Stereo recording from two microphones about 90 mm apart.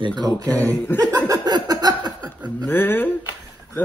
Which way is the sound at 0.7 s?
15° left (ahead or behind).